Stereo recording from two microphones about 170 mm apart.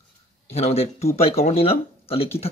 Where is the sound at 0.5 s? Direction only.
35° left (ahead or behind).